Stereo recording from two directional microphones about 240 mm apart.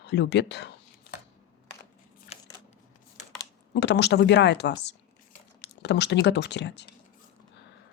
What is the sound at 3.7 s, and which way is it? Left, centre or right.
Speech, left.